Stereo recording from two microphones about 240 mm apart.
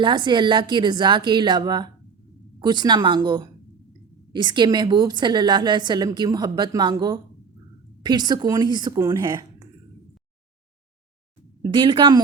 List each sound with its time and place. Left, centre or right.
0.0 s a woman's voice: centre
11.6 s a woman's voice: centre